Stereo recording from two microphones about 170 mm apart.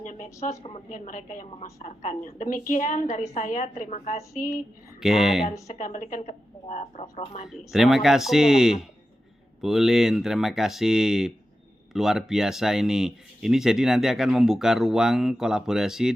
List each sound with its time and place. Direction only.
0.0 s a woman's voice: 50° left (ahead or behind)
4.9 s speech: 5° right (ahead or behind)
5.6 s a woman's voice: 45° left (ahead or behind)
7.4 s speech: centre (ahead or behind)